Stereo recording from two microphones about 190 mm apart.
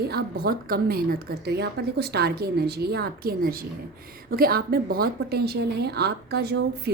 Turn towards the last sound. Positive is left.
turn(degrees=-60)  # may be behind; listen again after turning